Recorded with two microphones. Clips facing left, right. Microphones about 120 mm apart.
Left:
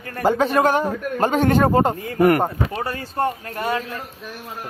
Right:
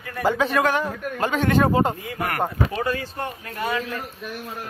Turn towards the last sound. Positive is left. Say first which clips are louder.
# left 2 dB
turn(degrees=45)  # may be behind; listen again after turning